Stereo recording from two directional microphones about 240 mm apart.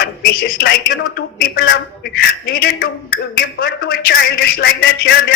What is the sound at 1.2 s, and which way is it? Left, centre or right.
A man's voice, left.